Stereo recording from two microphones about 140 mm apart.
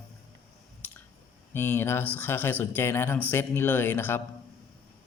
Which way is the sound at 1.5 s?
15° left (ahead or behind).